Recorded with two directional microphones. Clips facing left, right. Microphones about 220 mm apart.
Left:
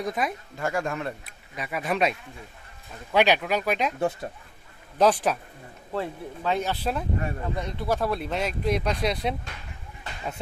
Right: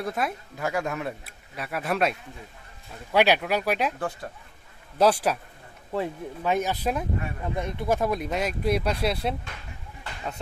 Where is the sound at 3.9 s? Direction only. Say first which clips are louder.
Left 5 dB; 25° left (ahead or behind).